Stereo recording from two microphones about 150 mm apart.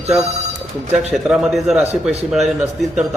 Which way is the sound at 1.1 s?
Centre (ahead or behind).